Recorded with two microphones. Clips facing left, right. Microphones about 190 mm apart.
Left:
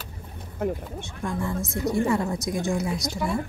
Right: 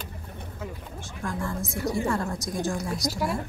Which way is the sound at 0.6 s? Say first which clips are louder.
Left 11 dB; 60° left (ahead or behind).